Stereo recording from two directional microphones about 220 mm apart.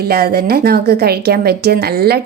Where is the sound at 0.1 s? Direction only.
45° right (ahead or behind).